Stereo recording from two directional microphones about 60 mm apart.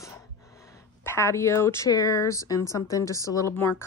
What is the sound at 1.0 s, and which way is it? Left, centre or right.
Speech, left.